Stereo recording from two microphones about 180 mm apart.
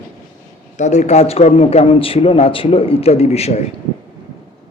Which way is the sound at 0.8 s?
40° left (ahead or behind).